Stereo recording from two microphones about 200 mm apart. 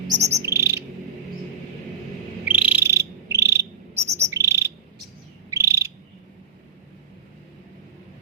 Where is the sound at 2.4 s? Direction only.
10° right (ahead or behind).